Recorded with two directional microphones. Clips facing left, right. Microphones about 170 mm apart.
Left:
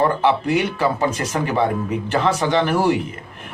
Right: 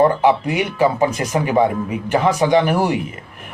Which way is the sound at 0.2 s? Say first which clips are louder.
Right 1 dB; 15° right (ahead or behind).